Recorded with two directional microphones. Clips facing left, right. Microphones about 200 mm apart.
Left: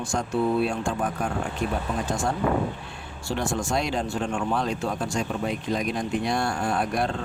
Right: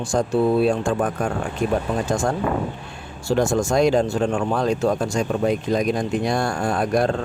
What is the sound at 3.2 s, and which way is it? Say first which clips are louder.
Speech: right 8 dB; 45° right (ahead or behind).